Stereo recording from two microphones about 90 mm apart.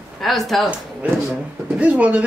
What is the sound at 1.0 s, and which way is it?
Speech, 15° right (ahead or behind).